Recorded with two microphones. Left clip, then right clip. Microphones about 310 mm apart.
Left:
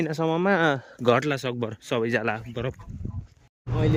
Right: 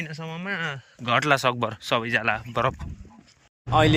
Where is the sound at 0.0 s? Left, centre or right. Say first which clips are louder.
Left 10 dB; left; by 2.7 s centre.